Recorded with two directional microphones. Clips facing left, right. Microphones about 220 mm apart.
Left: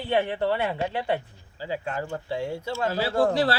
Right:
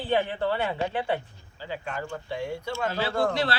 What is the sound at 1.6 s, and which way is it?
Speech, 30° left (ahead or behind).